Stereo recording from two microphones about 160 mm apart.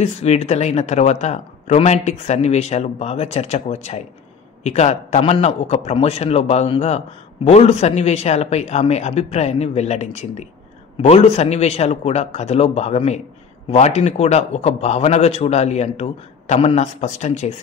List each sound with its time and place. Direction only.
0.0 s a man's voice: 40° left (ahead or behind)